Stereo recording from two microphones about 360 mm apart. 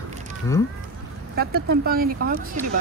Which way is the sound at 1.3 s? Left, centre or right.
Right.